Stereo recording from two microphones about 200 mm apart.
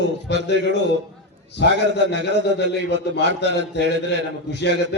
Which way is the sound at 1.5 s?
60° left (ahead or behind).